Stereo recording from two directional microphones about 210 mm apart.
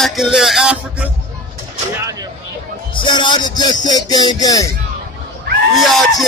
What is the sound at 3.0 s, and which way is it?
Music, 20° left (ahead or behind).